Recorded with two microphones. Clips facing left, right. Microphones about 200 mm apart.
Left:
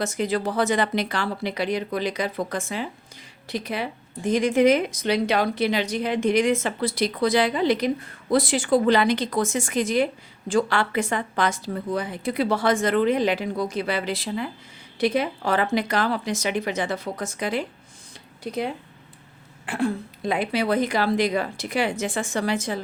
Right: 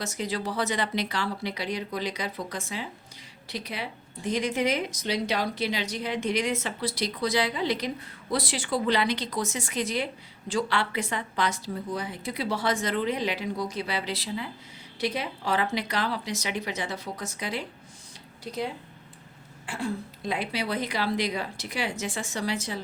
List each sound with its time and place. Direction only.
0.0 s speech: 55° left (ahead or behind)
19.6 s speech: 55° left (ahead or behind)